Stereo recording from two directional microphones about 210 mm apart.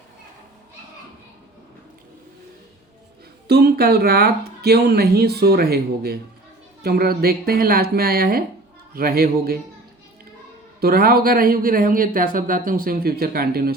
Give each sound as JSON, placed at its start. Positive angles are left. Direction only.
{"t": 3.4, "sound": "speech", "side_deg": -50}
{"t": 10.8, "sound": "speech", "side_deg": -45}